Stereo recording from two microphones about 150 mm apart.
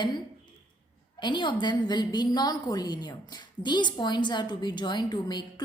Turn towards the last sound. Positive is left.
turn(degrees=30)  # may be behind; listen again after turning